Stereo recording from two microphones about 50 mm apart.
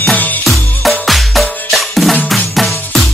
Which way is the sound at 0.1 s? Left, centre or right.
Left.